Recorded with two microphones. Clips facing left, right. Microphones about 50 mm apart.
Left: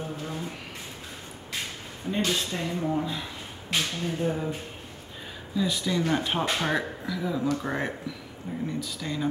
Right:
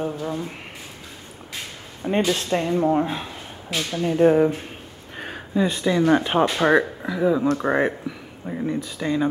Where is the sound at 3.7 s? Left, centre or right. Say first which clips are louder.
Right 1 dB; centre.